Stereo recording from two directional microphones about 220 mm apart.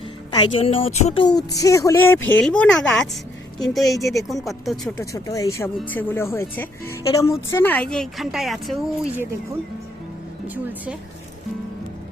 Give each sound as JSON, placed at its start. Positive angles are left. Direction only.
{"t": 0.3, "sound": "a woman's voice", "side_deg": 20}
{"t": 1.4, "sound": "speech", "side_deg": 15}
{"t": 10.4, "sound": "speech", "side_deg": -5}